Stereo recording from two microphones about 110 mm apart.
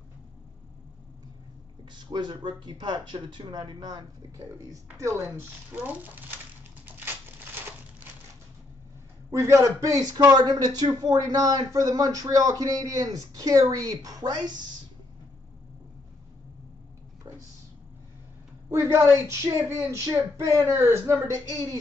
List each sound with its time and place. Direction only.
2.0 s speech: 45° right (ahead or behind)
4.9 s speech: 25° right (ahead or behind)
9.3 s a man's voice: 25° right (ahead or behind)
18.7 s speech: 25° right (ahead or behind)